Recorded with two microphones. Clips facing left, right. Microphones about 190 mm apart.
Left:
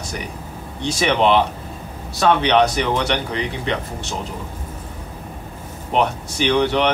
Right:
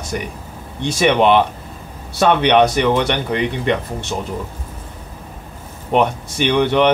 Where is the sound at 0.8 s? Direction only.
55° right (ahead or behind).